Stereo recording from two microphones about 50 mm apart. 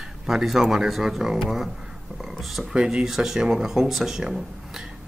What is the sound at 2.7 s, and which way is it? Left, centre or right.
Speech, centre.